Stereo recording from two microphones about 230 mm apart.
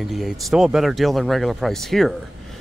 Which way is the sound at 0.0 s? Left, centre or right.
Centre.